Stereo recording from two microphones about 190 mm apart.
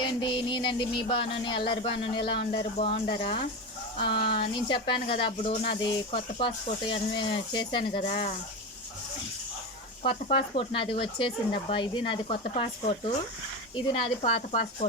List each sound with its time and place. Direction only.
0.0 s speech: 25° left (ahead or behind)
10.0 s speech: 30° left (ahead or behind)